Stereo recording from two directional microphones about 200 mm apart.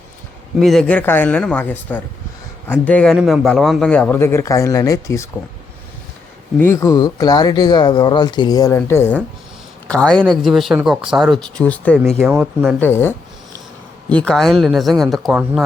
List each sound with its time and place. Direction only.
0.6 s speech: centre (ahead or behind)
6.6 s speech: 15° left (ahead or behind); by 12.7 s 5° right (ahead or behind)
12.8 s speech: 10° left (ahead or behind)